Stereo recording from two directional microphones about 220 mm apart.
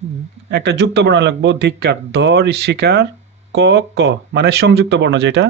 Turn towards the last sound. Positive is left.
turn(degrees=-55)  # may be behind; listen again after turning